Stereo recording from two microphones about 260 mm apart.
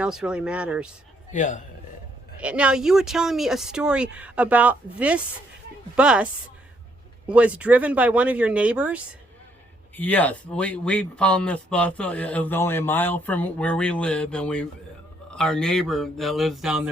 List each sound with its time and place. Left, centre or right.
0.0 s speech: centre
1.3 s a man's voice: left
2.4 s speech: centre
7.3 s speech: centre
9.9 s speech: centre